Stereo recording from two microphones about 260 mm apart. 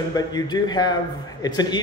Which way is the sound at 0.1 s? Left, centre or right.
Centre.